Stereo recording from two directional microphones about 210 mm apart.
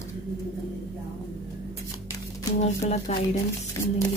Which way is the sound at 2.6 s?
30° left (ahead or behind).